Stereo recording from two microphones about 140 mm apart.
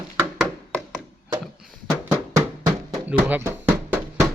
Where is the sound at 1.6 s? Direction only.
5° right (ahead or behind).